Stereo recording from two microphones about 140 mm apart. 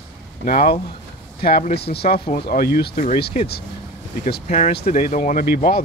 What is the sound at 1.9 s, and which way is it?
Speech, 65° left (ahead or behind).